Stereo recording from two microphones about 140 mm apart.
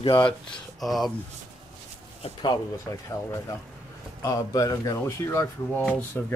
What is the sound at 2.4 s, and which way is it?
Speech, 20° left (ahead or behind).